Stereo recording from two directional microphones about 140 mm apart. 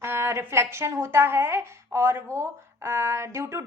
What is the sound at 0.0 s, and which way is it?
Speech, 20° right (ahead or behind).